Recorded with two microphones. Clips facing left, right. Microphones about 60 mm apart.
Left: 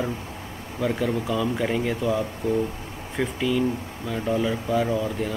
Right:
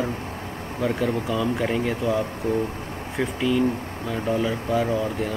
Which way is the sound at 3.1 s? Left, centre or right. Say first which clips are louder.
Right 1 dB; centre.